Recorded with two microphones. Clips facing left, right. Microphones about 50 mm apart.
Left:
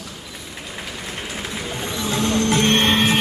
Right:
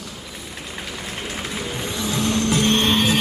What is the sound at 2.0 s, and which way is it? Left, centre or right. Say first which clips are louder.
Vehicle: left 2 dB; left.